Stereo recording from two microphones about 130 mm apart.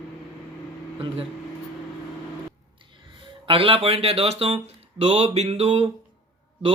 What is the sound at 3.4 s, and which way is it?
Speech, 45° right (ahead or behind).